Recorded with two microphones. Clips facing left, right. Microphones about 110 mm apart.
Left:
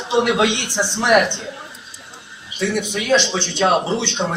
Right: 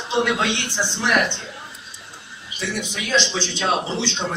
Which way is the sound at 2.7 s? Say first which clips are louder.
Left 5 dB; 55° left (ahead or behind).